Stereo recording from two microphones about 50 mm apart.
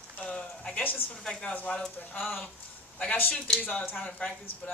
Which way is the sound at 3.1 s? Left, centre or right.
Left.